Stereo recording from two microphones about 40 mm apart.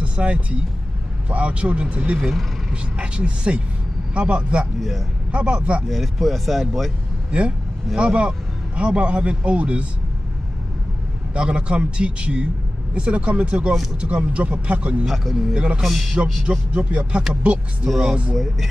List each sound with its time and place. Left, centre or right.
0.0 s a man's voice: right
4.7 s speech: centre
5.3 s a man's voice: right
5.9 s speech: centre
7.2 s a man's voice: right
11.3 s a man's voice: right
15.0 s speech: centre
15.5 s a man's voice: right
15.8 s speech: centre
16.2 s a man's voice: right
18.3 s speech: centre